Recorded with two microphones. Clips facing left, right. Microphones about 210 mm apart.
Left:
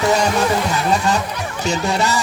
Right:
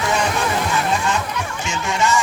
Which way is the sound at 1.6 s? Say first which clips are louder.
Left 3 dB; 35° left (ahead or behind).